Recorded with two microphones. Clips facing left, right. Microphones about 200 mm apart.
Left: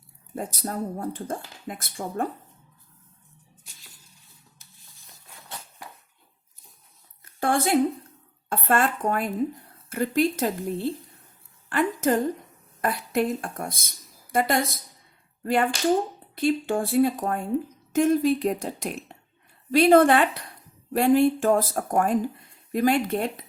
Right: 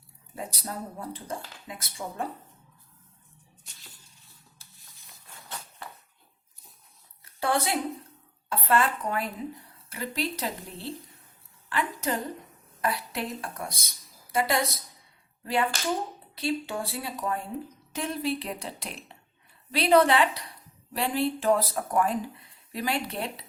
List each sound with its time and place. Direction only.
0.3 s speech: 50° left (ahead or behind)
7.3 s a sound: 50° left (ahead or behind)
8.4 s a woman's voice: 50° left (ahead or behind)